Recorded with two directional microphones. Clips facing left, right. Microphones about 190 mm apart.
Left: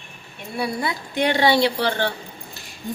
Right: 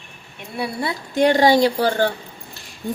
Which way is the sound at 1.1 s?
40° right (ahead or behind).